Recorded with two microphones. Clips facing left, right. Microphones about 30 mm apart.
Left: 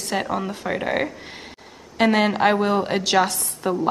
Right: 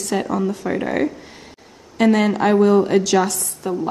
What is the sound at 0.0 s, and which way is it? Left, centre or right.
Speech, centre.